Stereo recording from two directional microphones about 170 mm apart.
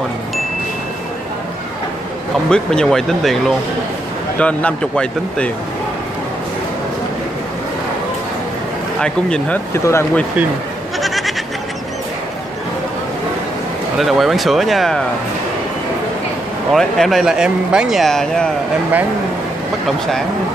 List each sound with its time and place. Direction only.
2.5 s speech: 5° left (ahead or behind)
9.0 s speech: 5° left (ahead or behind)
9.8 s speech: 15° left (ahead or behind)
11.0 s goat: centre (ahead or behind)
13.9 s speech: centre (ahead or behind)
16.7 s speech: centre (ahead or behind)